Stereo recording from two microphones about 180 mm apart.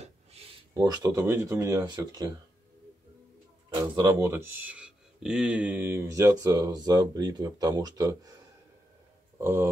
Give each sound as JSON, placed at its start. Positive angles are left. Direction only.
{"t": 0.0, "sound": "a sound", "side_deg": -35}
{"t": 0.7, "sound": "speech", "side_deg": -20}
{"t": 3.7, "sound": "speech", "side_deg": -20}
{"t": 9.4, "sound": "speech", "side_deg": -15}